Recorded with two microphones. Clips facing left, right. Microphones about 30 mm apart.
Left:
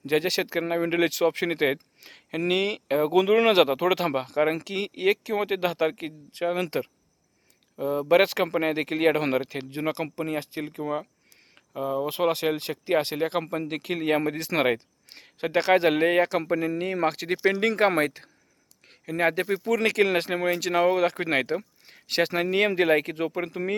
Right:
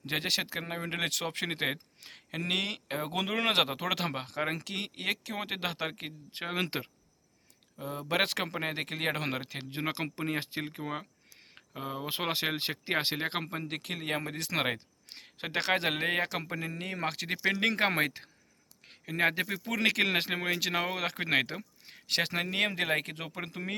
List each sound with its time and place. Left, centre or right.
0.0 s speech: centre
0.3 s speech: centre
0.7 s speech: centre
6.3 s speech: right
7.8 s speech: centre
9.8 s speech: right
10.8 s speech: centre
11.5 s speech: right
13.4 s speech: centre
13.7 s speech: centre
17.6 s speech: centre